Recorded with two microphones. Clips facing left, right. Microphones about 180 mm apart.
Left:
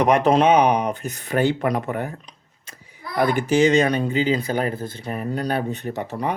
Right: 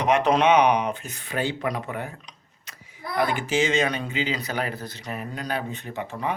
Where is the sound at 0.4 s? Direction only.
30° left (ahead or behind).